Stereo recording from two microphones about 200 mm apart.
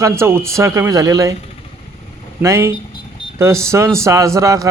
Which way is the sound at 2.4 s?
15° right (ahead or behind).